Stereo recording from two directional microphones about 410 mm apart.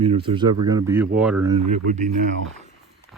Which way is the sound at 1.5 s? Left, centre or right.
Centre.